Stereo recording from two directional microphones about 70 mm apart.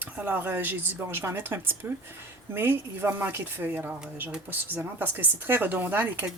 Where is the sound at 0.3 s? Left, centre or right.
Right.